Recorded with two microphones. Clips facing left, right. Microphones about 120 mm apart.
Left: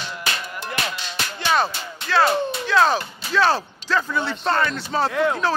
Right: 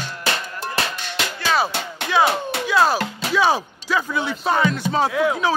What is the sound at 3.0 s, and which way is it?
Music, 90° right.